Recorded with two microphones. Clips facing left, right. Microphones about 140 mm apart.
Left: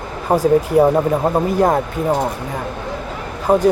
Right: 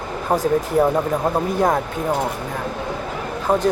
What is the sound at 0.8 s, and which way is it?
Speech, 10° left (ahead or behind).